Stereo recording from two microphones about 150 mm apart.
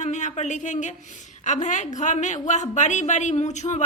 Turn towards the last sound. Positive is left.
turn(degrees=50)  # may be behind; listen again after turning